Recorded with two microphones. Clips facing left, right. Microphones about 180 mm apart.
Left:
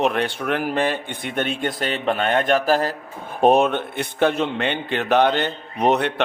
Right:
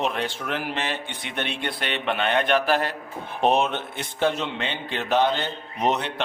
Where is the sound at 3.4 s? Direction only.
50° left (ahead or behind).